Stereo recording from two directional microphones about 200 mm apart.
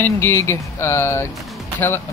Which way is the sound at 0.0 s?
15° left (ahead or behind).